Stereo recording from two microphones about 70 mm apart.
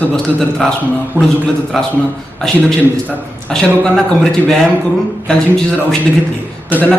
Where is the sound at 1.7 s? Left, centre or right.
Centre.